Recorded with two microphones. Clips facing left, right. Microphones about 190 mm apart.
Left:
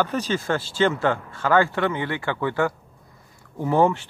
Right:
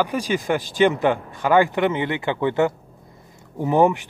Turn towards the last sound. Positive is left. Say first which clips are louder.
# right 2 dB
turn(degrees=-15)  # may be behind; listen again after turning